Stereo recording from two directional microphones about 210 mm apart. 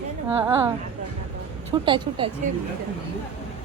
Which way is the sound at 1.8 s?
20° right (ahead or behind).